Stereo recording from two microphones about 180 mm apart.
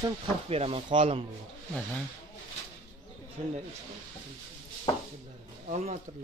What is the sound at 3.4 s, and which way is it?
Speech, 40° right (ahead or behind).